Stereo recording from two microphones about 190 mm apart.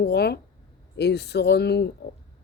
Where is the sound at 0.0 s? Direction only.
60° left (ahead or behind).